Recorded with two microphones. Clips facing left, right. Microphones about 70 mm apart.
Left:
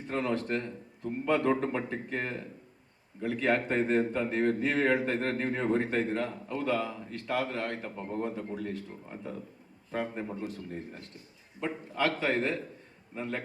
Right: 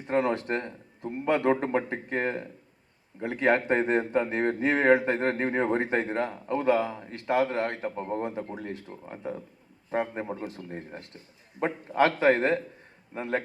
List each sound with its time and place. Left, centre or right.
0.2 s a man's voice: right
12.0 s a man's voice: right